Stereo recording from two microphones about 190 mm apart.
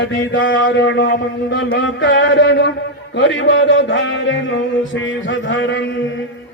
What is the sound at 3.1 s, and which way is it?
A man's voice, 75° left (ahead or behind).